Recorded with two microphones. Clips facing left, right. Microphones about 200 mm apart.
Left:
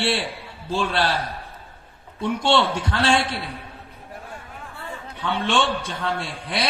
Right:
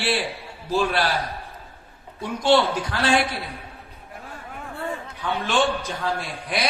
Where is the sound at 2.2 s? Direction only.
25° left (ahead or behind).